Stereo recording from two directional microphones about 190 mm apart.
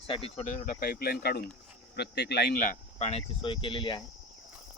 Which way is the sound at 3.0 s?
35° left (ahead or behind).